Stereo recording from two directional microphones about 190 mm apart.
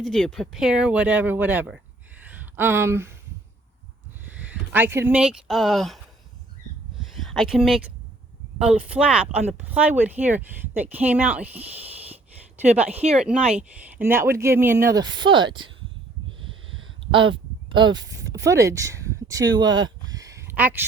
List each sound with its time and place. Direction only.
0.0 s speech: centre (ahead or behind)
2.2 s a sound: 10° right (ahead or behind)
4.3 s speech: 10° right (ahead or behind)
7.1 s speech: centre (ahead or behind)
12.9 s speech: 35° right (ahead or behind)
13.1 s speech: 5° right (ahead or behind); by 15.7 s 25° right (ahead or behind)
16.4 s a sound: 25° right (ahead or behind)
18.3 s speech: 15° right (ahead or behind)
20.1 s a sound: 20° right (ahead or behind)